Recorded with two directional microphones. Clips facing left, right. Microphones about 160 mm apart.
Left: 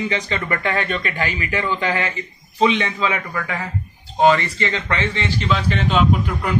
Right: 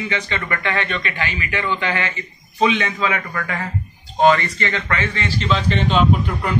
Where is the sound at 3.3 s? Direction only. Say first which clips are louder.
Even; 10° left (ahead or behind).